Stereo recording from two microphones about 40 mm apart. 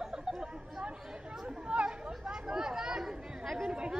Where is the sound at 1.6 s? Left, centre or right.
Right.